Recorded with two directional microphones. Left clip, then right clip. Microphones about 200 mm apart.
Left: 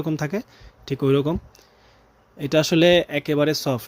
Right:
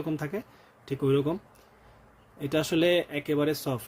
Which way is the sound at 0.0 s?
35° left (ahead or behind).